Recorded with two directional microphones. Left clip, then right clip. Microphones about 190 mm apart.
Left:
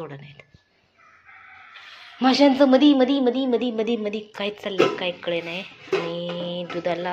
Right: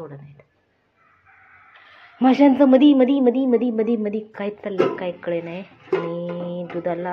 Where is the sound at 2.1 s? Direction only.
15° right (ahead or behind).